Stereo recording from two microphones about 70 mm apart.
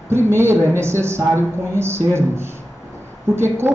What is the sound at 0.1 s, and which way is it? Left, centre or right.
A woman's voice, right.